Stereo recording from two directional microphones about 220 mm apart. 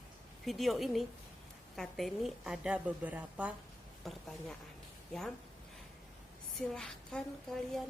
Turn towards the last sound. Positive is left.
turn(degrees=0)  # may be behind; listen again after turning